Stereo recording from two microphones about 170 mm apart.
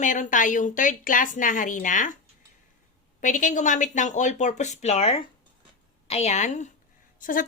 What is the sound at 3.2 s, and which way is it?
A woman's voice, 45° left (ahead or behind).